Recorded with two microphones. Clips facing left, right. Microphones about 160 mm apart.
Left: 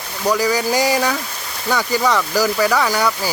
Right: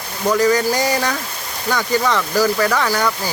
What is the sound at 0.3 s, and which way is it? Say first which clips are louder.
Speech: right 3 dB; 10° left (ahead or behind).